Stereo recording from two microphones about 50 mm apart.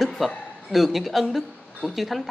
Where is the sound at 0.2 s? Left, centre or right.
Centre.